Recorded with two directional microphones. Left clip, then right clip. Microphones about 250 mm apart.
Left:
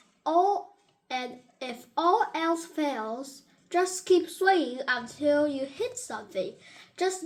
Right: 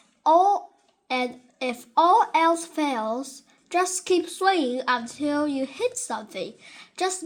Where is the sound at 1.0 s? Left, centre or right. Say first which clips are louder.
Right 7 dB; right.